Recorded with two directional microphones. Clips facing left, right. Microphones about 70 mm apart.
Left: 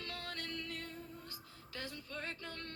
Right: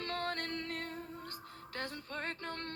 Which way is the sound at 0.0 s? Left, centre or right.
Right.